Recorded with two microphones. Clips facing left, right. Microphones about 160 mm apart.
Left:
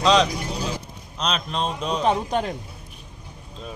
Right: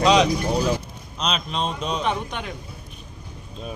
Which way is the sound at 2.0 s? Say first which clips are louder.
Left 5 dB; 35° left (ahead or behind).